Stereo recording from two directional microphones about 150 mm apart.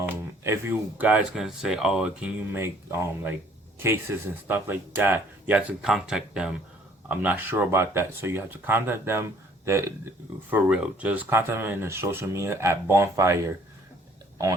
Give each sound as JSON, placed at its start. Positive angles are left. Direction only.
{"t": 0.0, "sound": "speech", "side_deg": -15}
{"t": 2.6, "sound": "speech", "side_deg": -15}